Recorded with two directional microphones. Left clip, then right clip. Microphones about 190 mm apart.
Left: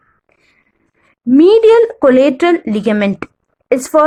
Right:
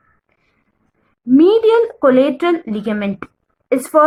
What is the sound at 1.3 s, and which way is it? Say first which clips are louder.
A woman's voice: left 4 dB; 35° left (ahead or behind).